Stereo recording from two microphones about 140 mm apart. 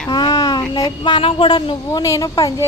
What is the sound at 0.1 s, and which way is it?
Speech, 30° left (ahead or behind).